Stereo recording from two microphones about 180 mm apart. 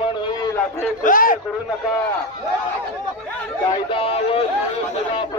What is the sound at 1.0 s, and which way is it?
Speech, 50° left (ahead or behind).